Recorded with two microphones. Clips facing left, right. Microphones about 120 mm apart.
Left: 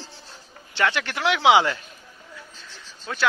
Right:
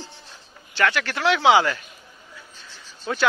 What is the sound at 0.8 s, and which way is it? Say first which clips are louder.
Speech: right 1 dB; 20° left (ahead or behind).